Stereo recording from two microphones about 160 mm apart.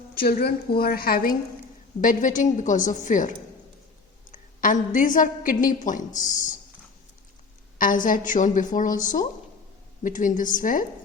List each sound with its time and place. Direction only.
0.1 s a woman's voice: 65° left (ahead or behind)
2.0 s a woman's voice: 55° left (ahead or behind)
7.8 s a woman's voice: 55° left (ahead or behind)